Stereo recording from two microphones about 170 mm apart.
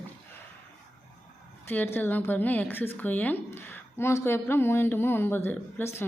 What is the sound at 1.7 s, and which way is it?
Speech, 10° left (ahead or behind).